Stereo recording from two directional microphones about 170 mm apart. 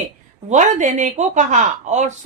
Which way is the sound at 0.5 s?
45° right (ahead or behind).